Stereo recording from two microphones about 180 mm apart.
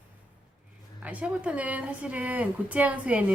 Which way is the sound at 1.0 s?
5° right (ahead or behind).